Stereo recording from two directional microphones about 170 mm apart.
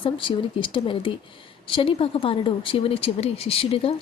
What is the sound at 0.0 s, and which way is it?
A woman's voice, 30° left (ahead or behind).